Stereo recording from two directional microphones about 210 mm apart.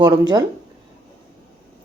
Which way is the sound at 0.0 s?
20° right (ahead or behind).